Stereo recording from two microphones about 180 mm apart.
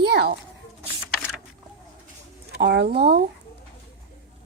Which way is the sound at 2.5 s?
75° right (ahead or behind).